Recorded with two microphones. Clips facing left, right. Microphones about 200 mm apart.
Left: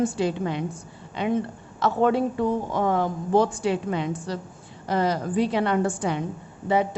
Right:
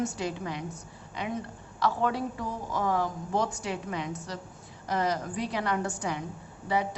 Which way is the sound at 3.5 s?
30° left (ahead or behind).